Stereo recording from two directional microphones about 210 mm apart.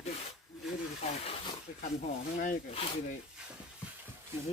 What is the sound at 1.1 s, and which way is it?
Snake, 30° left (ahead or behind).